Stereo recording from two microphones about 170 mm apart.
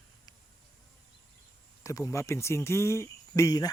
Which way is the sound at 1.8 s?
15° left (ahead or behind).